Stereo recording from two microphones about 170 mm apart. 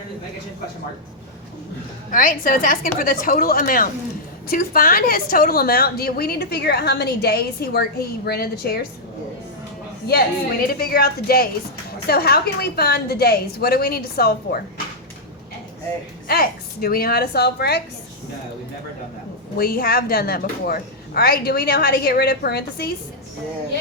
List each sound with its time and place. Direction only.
2.0 s a woman's voice: 50° left (ahead or behind)
10.7 s a woman's voice: 60° left (ahead or behind)
16.2 s a woman's voice: 60° left (ahead or behind)
19.5 s a woman's voice: 60° left (ahead or behind)